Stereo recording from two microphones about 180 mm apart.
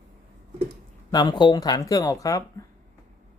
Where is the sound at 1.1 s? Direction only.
25° left (ahead or behind).